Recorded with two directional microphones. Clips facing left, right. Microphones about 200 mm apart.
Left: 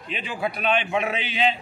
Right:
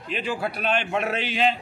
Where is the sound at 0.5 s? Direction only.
45° right (ahead or behind).